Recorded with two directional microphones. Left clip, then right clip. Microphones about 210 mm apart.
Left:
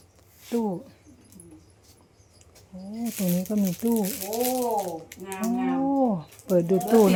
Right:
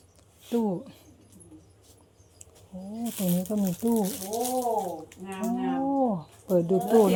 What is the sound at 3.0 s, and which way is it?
Speech, 10° left (ahead or behind).